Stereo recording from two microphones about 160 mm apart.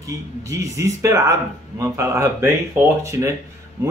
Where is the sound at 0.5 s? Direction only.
20° right (ahead or behind).